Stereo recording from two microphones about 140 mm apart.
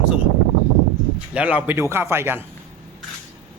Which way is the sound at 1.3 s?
10° right (ahead or behind).